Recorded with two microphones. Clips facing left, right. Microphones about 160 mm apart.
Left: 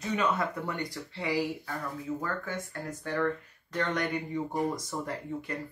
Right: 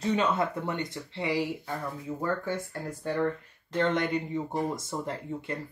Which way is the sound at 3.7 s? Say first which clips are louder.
Right 4 dB; 25° right (ahead or behind).